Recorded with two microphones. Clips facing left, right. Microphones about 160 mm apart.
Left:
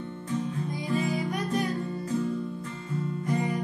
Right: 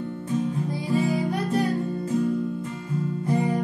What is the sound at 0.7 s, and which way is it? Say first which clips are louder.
Music: right 3 dB; 30° right (ahead or behind).